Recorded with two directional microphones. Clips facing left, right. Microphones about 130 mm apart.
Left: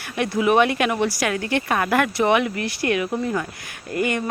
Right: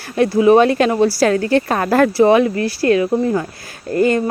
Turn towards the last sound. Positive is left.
turn(degrees=-35)  # may be behind; listen again after turning